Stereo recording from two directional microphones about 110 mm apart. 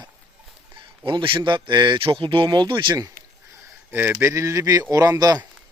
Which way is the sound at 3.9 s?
20° right (ahead or behind).